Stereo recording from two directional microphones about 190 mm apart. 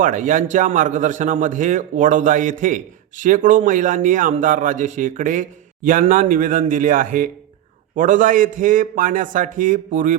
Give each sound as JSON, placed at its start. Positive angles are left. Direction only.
{"t": 0.0, "sound": "a man's voice", "side_deg": -40}